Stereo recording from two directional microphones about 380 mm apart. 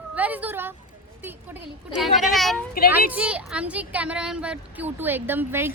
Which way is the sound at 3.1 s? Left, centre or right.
Centre.